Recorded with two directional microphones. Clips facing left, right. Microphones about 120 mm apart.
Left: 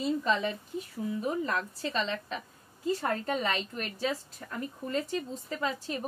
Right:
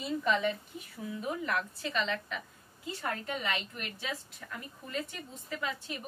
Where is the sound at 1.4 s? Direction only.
35° left (ahead or behind).